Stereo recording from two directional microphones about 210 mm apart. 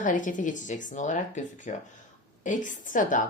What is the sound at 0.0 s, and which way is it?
A woman's voice, 40° left (ahead or behind).